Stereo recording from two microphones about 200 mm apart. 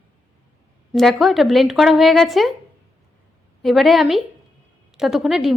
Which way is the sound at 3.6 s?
Centre (ahead or behind).